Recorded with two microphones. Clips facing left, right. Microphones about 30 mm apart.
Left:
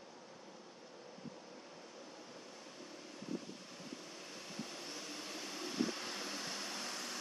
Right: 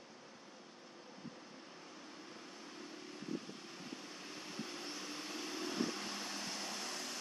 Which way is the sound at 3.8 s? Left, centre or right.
Centre.